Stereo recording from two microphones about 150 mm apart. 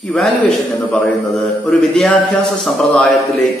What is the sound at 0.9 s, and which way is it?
Speech, 15° left (ahead or behind).